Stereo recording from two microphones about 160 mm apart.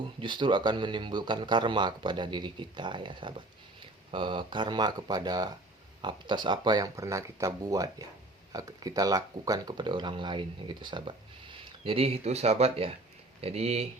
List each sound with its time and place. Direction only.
0.2 s speech: 30° right (ahead or behind)